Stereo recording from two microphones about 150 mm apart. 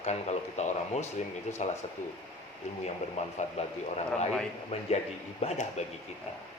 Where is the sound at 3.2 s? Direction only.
50° left (ahead or behind).